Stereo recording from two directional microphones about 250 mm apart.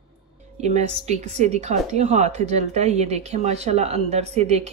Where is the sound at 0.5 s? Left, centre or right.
Right.